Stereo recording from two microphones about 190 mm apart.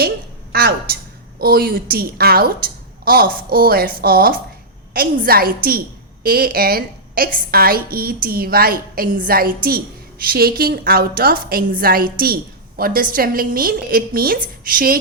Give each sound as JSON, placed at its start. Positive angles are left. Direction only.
{"t": 0.5, "sound": "a woman's voice", "side_deg": -55}